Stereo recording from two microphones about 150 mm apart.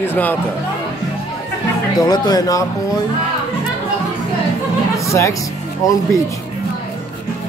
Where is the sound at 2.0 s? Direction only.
25° left (ahead or behind).